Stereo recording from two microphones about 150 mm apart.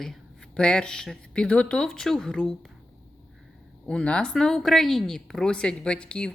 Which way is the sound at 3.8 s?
5° left (ahead or behind).